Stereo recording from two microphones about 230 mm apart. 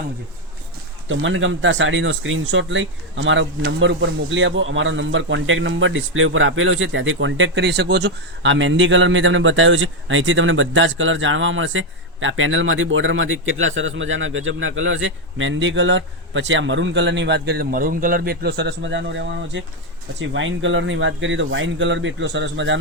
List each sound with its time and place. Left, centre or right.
1.0 s a man's voice: right